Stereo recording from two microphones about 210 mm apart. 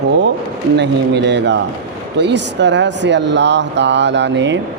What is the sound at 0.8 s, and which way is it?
Speech, 55° right (ahead or behind).